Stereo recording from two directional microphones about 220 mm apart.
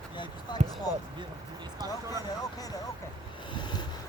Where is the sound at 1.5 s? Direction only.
20° right (ahead or behind).